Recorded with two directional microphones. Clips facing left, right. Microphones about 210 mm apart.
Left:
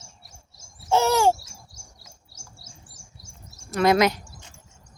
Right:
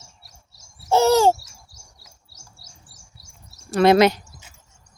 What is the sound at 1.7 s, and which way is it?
Chirp, 50° left (ahead or behind).